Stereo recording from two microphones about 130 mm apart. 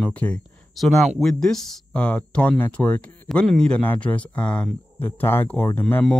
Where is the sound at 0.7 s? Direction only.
Centre (ahead or behind).